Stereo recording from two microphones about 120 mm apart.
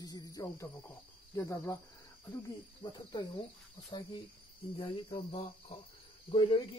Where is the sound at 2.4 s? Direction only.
35° left (ahead or behind).